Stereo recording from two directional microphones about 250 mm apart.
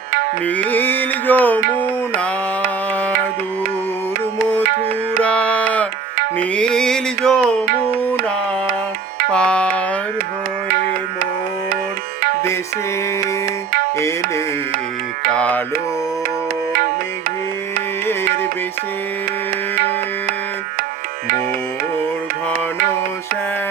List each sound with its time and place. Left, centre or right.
0.4 s music: centre
4.6 s music: right
5.2 s music: centre
9.3 s music: centre
10.7 s music: right
13.9 s music: centre